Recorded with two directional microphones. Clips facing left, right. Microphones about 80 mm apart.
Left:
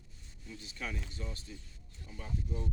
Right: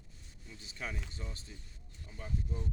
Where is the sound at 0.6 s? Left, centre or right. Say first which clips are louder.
Even; right.